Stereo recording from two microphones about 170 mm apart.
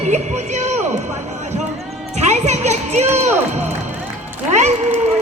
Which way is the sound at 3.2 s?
40° right (ahead or behind).